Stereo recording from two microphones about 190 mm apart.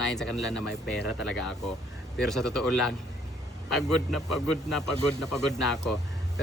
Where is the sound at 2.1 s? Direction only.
Centre (ahead or behind).